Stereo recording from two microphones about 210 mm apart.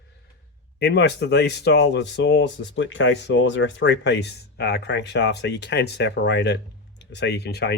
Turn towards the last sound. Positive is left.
turn(degrees=50)  # may be behind; listen again after turning